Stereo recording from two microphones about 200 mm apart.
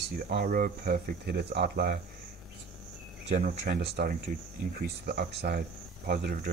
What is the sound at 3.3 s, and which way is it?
Speech, 45° right (ahead or behind).